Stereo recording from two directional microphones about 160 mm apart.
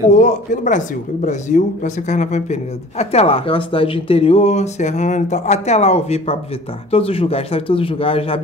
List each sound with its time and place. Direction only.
0.1 s speech: 50° left (ahead or behind)